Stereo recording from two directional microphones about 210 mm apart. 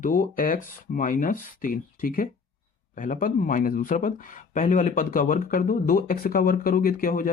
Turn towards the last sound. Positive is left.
turn(degrees=40)  # may be behind; listen again after turning